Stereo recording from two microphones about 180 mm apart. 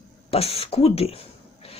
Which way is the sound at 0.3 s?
35° left (ahead or behind).